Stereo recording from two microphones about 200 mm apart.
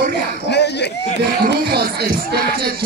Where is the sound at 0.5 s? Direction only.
60° left (ahead or behind).